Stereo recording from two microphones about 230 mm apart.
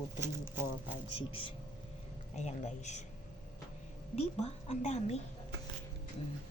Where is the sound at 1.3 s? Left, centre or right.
Left.